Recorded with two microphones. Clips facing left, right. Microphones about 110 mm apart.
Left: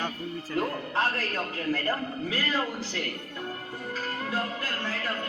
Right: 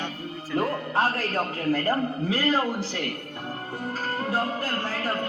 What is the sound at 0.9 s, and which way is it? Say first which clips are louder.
Speech: right 4 dB; 40° right (ahead or behind).